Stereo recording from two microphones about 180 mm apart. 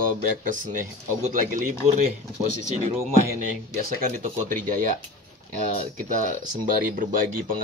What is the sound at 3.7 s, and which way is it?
Speech, 50° right (ahead or behind).